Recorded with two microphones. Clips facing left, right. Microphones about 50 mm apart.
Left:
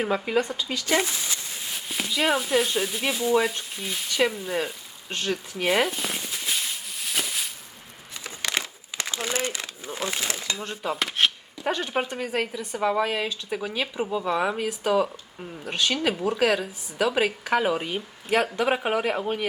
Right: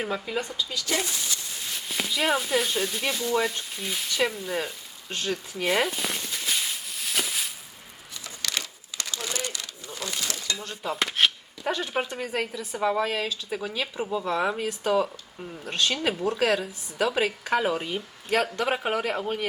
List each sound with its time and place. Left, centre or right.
0.3 s speech: left
1.9 s speech: centre
8.1 s crumpling: left
10.8 s chopping: centre
12.1 s speech: centre